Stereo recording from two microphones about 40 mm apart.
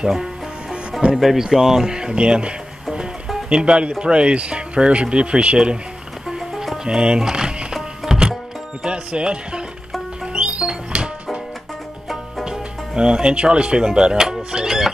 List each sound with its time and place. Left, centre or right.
0.1 s music: centre
1.1 s speech: centre; by 5.8 s right
6.2 s music: centre
6.8 s music: right
8.8 s speech: right
10.2 s music: right
12.4 s speech: right
14.5 s music: centre